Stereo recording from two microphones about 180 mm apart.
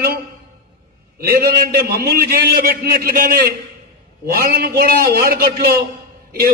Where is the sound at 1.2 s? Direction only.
55° right (ahead or behind).